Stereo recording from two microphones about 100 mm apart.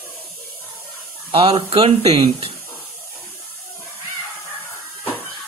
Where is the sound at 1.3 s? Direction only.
65° right (ahead or behind).